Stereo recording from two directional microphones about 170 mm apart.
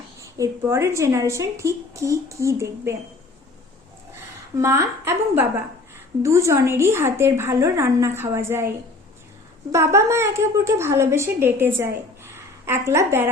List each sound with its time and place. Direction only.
0.3 s a woman's voice: 20° right (ahead or behind)
4.5 s a woman's voice: 15° right (ahead or behind)
9.7 s a woman's voice: 15° right (ahead or behind)